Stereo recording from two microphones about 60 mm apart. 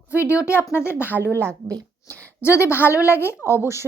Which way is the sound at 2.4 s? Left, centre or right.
Left.